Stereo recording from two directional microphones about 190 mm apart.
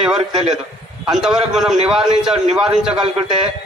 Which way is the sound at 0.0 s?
5° right (ahead or behind).